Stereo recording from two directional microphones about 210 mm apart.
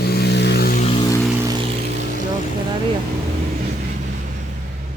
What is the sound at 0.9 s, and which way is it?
Vehicle, 25° left (ahead or behind).